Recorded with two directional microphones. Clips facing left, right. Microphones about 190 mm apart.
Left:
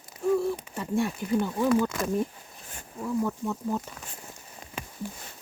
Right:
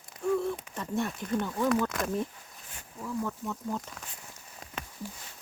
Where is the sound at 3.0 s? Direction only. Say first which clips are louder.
Left 5 dB; 15° left (ahead or behind).